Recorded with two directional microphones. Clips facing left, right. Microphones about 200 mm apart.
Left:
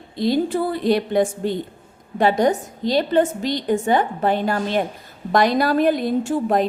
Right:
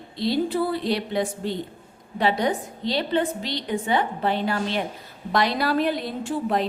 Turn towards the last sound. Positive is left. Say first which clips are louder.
# left 5 dB
turn(degrees=45)  # may be behind; listen again after turning